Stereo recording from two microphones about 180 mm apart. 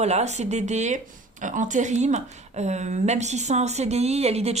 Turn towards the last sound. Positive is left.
turn(degrees=-35)  # may be behind; listen again after turning